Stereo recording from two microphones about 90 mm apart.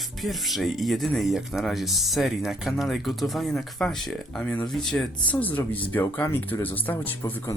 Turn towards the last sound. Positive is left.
turn(degrees=20)  # may be behind; listen again after turning